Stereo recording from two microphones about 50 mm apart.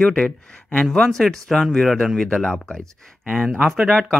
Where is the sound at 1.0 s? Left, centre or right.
Centre.